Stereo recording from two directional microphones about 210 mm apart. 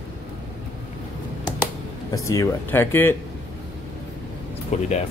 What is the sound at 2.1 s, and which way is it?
Speech, 15° left (ahead or behind).